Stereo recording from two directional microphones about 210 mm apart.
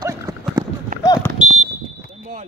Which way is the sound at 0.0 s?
15° right (ahead or behind).